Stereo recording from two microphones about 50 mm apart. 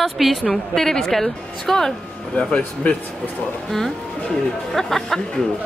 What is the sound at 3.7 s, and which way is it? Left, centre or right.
A woman's voice, centre.